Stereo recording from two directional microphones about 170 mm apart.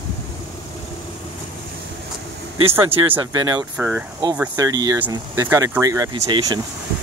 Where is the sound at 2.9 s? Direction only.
30° right (ahead or behind).